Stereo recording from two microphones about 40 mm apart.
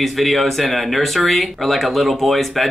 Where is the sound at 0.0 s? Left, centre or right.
Centre.